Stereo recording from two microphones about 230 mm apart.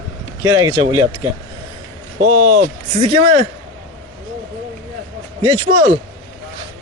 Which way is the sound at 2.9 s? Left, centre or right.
Right.